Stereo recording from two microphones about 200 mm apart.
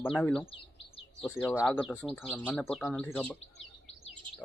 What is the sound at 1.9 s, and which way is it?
Speech, 10° left (ahead or behind).